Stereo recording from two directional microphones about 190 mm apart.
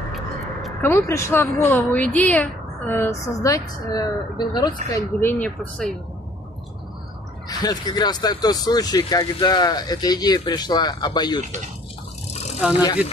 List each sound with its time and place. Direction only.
0.1 s a sound: centre (ahead or behind)
0.9 s speech: 15° left (ahead or behind)
7.4 s speech: 20° left (ahead or behind)
12.5 s speech: 5° right (ahead or behind)